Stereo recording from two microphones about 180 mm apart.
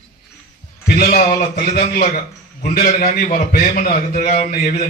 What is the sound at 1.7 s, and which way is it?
A man's voice, 55° left (ahead or behind).